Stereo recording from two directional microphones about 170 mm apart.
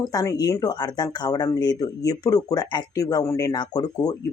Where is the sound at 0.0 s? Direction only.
20° left (ahead or behind).